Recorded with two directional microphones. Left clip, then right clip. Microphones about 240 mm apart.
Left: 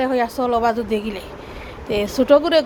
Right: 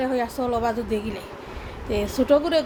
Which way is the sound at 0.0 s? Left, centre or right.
Centre.